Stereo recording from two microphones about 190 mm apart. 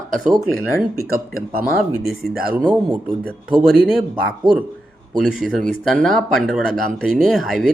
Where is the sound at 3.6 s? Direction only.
Centre (ahead or behind).